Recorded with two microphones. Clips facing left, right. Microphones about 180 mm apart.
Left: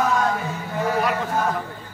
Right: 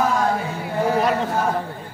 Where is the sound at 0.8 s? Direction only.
30° right (ahead or behind).